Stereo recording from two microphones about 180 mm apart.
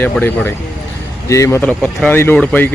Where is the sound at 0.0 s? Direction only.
10° left (ahead or behind).